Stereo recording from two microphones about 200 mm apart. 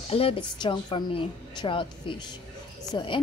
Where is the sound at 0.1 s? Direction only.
30° left (ahead or behind).